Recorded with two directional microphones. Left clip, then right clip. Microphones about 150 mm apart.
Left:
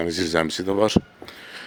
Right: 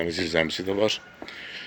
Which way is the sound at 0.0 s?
50° left (ahead or behind).